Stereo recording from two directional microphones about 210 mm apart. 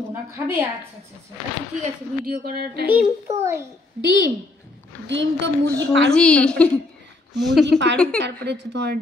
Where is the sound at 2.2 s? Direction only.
45° right (ahead or behind).